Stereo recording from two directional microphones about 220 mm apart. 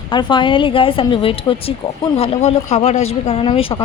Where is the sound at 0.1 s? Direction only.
20° left (ahead or behind).